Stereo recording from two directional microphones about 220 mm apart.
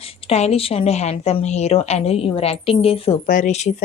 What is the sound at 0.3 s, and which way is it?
A woman's voice, 30° left (ahead or behind).